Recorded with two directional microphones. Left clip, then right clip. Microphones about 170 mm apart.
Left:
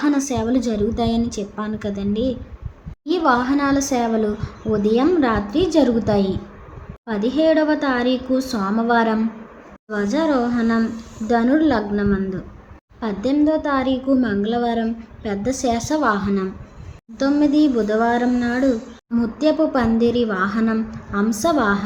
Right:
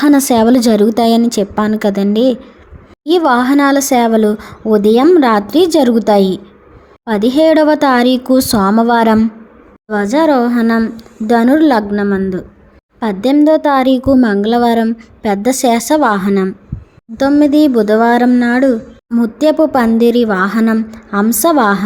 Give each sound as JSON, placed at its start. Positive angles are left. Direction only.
{"t": 0.0, "sound": "speech", "side_deg": -55}